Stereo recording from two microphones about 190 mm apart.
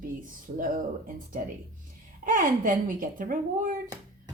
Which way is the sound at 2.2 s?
45° right (ahead or behind).